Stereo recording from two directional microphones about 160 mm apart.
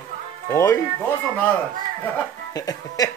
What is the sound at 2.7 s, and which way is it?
Speech, 25° left (ahead or behind).